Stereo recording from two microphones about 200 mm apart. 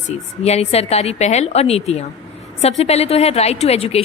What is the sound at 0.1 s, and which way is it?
A woman's voice, 30° left (ahead or behind).